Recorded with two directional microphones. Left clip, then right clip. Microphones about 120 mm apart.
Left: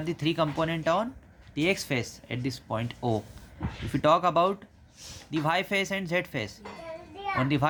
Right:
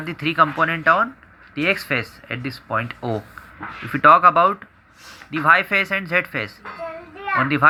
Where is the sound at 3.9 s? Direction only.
25° left (ahead or behind).